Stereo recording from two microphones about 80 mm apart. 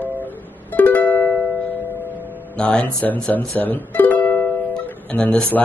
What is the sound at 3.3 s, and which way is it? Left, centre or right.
Speech, left.